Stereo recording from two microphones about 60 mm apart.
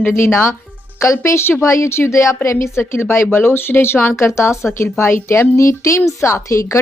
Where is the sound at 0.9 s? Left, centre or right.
Left.